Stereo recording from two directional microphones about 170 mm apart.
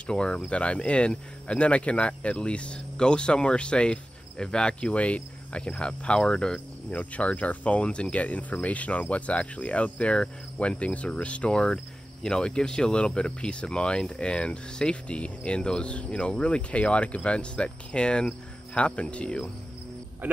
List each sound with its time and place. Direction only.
0.0 s speech: 5° left (ahead or behind)